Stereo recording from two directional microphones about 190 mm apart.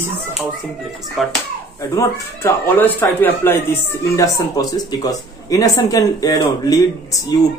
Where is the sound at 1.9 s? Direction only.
15° left (ahead or behind).